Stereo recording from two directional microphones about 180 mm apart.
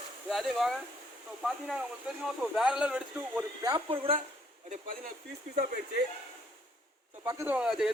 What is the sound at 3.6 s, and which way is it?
Speech, 25° right (ahead or behind).